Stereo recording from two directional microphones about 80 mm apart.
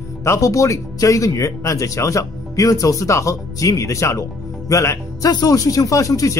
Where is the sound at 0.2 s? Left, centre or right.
Left.